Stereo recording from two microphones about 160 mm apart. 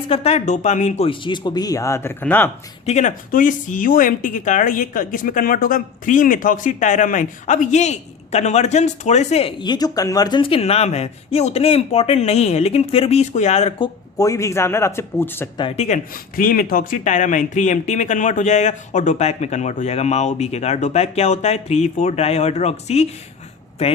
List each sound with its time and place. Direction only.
0.1 s speech: 40° left (ahead or behind); by 2.5 s 10° left (ahead or behind)
2.8 s speech: 45° left (ahead or behind)
13.8 s a man's voice: 20° left (ahead or behind)
15.5 s speech: 35° left (ahead or behind)
16.3 s speech: 60° left (ahead or behind); by 23.1 s 40° left (ahead or behind)